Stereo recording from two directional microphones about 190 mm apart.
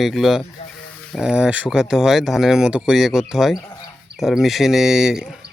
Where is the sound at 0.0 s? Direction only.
Centre (ahead or behind).